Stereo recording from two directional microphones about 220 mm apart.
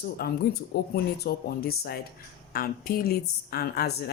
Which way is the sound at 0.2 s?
45° left (ahead or behind).